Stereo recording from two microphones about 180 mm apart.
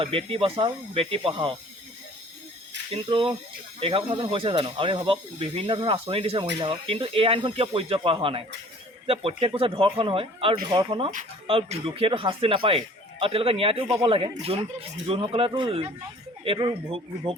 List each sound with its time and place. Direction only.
0.0 s speech: 30° right (ahead or behind)
2.9 s speech: 30° right (ahead or behind)